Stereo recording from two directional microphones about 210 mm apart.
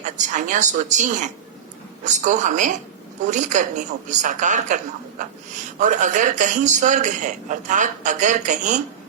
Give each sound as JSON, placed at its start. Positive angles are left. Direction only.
{"t": 0.0, "sound": "a man's voice", "side_deg": -35}